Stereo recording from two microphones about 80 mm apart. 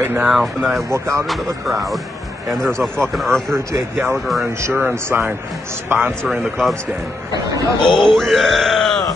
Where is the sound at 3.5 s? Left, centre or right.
Right.